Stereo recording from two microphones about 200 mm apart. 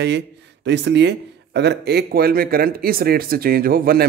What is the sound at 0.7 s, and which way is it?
Speech, 60° right (ahead or behind).